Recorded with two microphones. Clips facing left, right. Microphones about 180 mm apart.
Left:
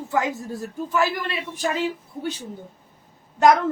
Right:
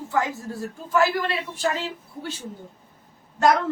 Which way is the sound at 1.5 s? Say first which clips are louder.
Left 2 dB; 15° left (ahead or behind).